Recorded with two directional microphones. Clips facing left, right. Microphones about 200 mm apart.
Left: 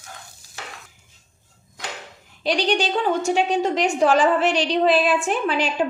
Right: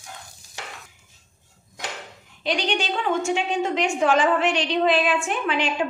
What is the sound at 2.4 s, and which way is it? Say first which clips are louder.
A woman's voice: left 4 dB; 35° left (ahead or behind).